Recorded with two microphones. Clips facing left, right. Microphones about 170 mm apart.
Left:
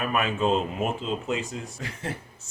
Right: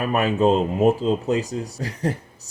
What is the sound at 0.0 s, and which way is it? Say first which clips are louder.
Speech: right 6 dB; 35° right (ahead or behind).